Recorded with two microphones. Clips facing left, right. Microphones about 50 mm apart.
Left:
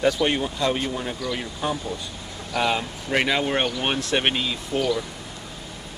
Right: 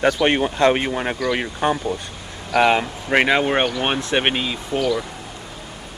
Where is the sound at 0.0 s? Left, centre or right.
Right; by 4.6 s centre.